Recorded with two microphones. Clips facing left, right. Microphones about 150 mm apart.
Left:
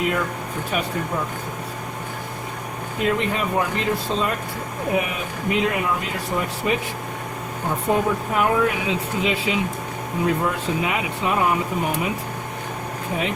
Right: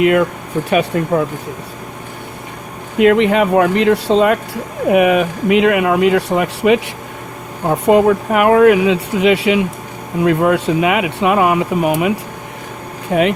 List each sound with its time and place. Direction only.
0.0 s speech: 80° right
3.0 s speech: 75° right (ahead or behind)